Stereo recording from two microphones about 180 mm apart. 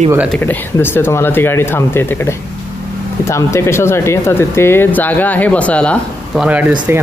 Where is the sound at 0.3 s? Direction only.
10° left (ahead or behind).